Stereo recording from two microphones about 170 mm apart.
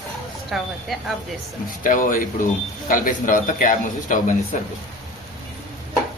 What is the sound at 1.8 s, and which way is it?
A man's voice, 55° left (ahead or behind).